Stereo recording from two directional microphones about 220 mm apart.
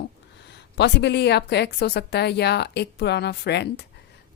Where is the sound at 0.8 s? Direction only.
50° left (ahead or behind).